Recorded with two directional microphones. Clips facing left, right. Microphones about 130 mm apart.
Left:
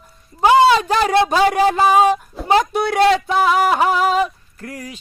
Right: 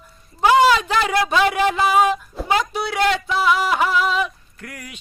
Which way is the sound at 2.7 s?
50° left (ahead or behind).